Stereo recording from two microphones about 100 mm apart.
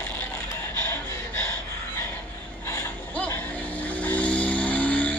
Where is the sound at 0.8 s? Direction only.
25° left (ahead or behind).